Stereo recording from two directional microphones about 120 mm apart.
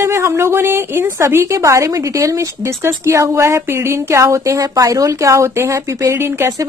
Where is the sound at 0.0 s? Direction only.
20° right (ahead or behind).